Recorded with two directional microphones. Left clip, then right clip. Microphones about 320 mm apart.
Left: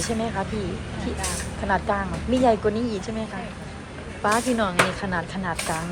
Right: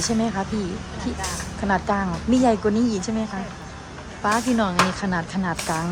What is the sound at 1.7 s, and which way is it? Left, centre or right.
Speech, centre.